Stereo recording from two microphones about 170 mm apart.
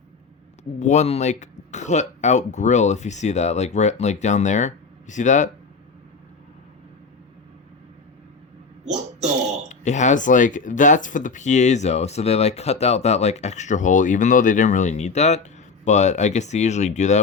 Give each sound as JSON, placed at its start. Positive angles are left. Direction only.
{"t": 0.8, "sound": "speech", "side_deg": 45}
{"t": 8.8, "sound": "a sound", "side_deg": -40}
{"t": 9.6, "sound": "speech", "side_deg": 45}